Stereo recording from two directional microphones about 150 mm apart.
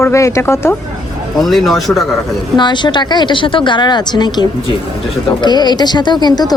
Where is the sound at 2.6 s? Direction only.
30° left (ahead or behind).